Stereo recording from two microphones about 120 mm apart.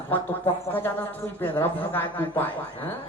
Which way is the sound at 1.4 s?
15° left (ahead or behind).